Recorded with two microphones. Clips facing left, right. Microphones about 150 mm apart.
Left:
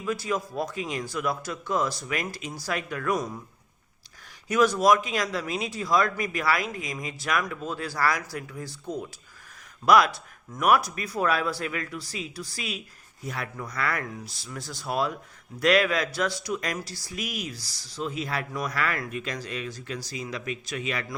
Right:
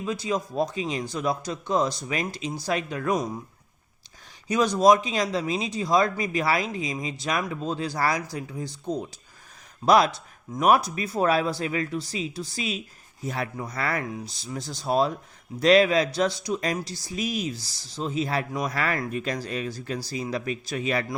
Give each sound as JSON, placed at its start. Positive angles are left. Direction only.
{"t": 0.0, "sound": "speech", "side_deg": -20}
{"t": 4.4, "sound": "speech", "side_deg": -20}
{"t": 9.8, "sound": "speech", "side_deg": -25}